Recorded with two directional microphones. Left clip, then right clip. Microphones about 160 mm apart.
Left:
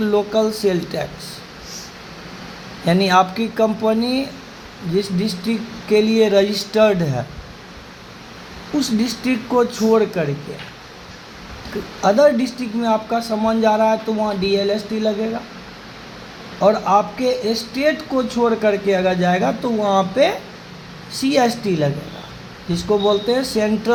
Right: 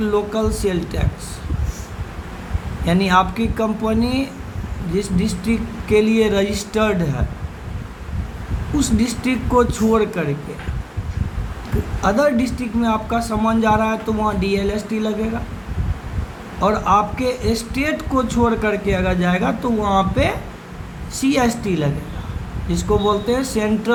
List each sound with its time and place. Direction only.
0.0 s speech: 40° left (ahead or behind)
2.8 s speech: 45° left (ahead or behind)
8.8 s speech: 40° left (ahead or behind)
12.0 s speech: 45° left (ahead or behind)
16.6 s speech: 40° left (ahead or behind)